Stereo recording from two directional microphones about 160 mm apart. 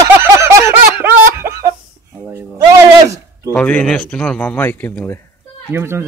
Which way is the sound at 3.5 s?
5° left (ahead or behind).